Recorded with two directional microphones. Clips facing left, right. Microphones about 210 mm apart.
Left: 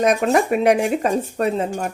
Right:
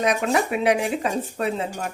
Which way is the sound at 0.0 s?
45° left (ahead or behind).